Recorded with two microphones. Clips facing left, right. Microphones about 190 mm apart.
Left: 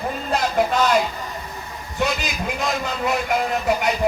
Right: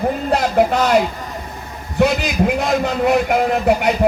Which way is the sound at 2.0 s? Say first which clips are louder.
Right 8 dB; 60° right (ahead or behind).